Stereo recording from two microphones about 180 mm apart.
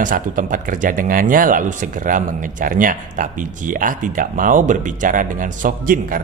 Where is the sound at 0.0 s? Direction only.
50° right (ahead or behind).